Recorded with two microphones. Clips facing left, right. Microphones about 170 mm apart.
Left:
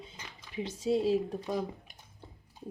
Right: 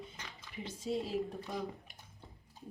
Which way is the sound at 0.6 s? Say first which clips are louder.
Left 9 dB; 90° left.